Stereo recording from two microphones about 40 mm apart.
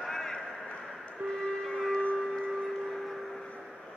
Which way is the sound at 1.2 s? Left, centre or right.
Right.